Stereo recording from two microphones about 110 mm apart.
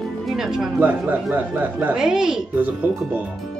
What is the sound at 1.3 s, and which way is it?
Speech, 15° right (ahead or behind).